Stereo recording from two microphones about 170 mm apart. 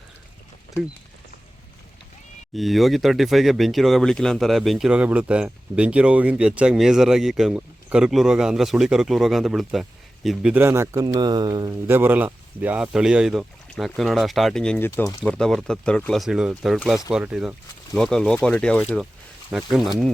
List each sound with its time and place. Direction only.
2.6 s speech: centre (ahead or behind); by 11.7 s 25° right (ahead or behind)
11.9 s speech: 10° right (ahead or behind)